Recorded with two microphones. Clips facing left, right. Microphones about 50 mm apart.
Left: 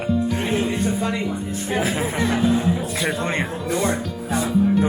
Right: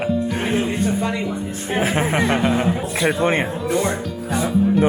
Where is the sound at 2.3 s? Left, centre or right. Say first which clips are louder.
Right 1 dB; right.